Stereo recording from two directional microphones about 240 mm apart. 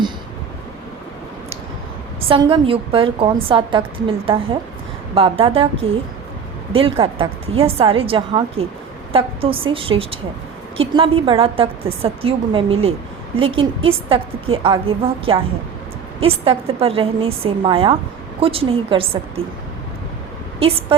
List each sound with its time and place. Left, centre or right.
2.3 s a woman's voice: right